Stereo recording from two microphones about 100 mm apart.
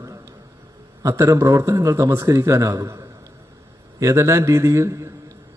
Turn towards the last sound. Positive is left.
turn(degrees=-30)  # may be behind; listen again after turning